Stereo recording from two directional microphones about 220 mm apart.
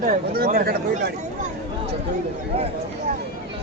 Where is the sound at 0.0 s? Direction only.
40° right (ahead or behind).